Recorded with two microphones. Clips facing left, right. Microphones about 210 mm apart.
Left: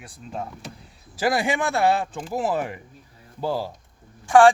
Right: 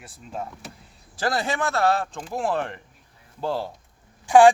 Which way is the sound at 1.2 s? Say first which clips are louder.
Left 3 dB; 10° left (ahead or behind).